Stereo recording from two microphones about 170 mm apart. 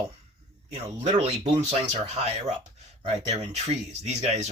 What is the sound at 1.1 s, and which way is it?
Speech, 35° right (ahead or behind).